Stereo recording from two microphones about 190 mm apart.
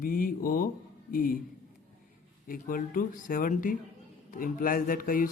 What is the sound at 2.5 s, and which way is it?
Speech, 45° left (ahead or behind).